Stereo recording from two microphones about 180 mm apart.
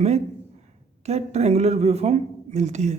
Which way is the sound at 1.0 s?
35° right (ahead or behind).